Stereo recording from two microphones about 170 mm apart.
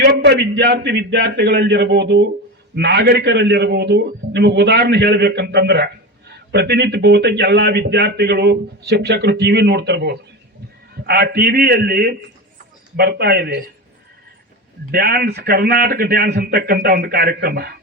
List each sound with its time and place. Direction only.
0.0 s a man's voice: 85° right
11.0 s a man's voice: 70° right (ahead or behind)
14.8 s a man's voice: 70° right (ahead or behind)